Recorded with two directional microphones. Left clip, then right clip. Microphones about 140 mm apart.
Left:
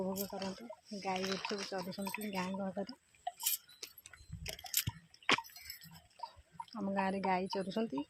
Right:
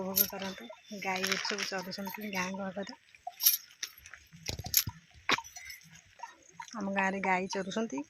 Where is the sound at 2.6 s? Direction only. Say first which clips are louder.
Right 2 dB; 35° right (ahead or behind).